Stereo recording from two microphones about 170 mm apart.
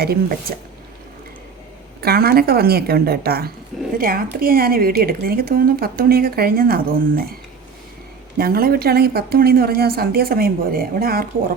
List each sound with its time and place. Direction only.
0.0 s a woman's voice: 65° right (ahead or behind)
2.0 s a woman's voice: 65° right (ahead or behind)
8.4 s a woman's voice: 65° right (ahead or behind)